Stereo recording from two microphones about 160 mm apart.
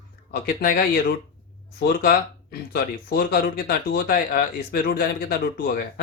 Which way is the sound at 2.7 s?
75° left (ahead or behind).